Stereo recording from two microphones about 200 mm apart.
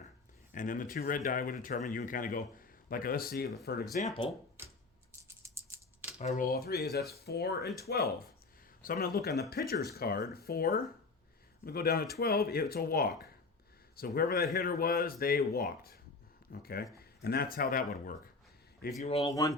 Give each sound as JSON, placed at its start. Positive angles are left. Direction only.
{"t": 0.5, "sound": "speech", "side_deg": 40}
{"t": 3.9, "sound": "speech", "side_deg": 30}
{"t": 5.4, "sound": "rattle", "side_deg": -15}
{"t": 6.1, "sound": "speech", "side_deg": 35}
{"t": 6.5, "sound": "speech", "side_deg": 50}
{"t": 19.0, "sound": "speech", "side_deg": 30}
{"t": 19.3, "sound": "speech", "side_deg": 15}